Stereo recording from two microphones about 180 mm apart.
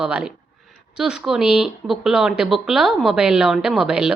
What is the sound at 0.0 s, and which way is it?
Speech, 5° right (ahead or behind).